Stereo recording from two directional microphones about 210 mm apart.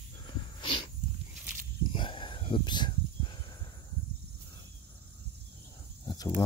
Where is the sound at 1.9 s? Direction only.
25° left (ahead or behind).